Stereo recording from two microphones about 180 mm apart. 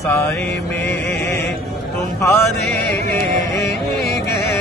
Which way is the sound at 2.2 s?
15° left (ahead or behind).